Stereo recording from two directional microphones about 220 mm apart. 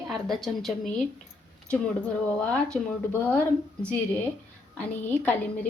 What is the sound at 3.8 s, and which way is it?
Speech, 5° left (ahead or behind).